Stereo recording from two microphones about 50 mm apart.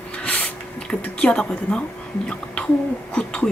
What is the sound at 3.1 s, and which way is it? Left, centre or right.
Throat clearing, centre.